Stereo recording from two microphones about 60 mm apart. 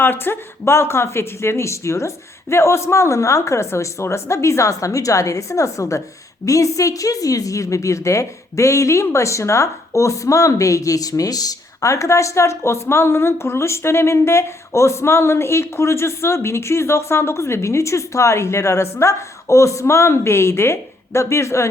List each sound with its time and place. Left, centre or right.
0.0 s a woman's voice: left